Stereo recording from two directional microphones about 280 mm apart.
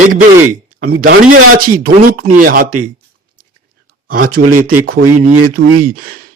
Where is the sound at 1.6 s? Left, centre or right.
Right.